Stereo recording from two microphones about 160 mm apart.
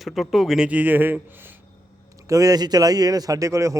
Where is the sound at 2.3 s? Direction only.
20° right (ahead or behind).